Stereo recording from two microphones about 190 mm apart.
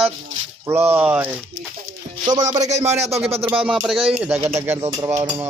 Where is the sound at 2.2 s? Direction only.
25° right (ahead or behind).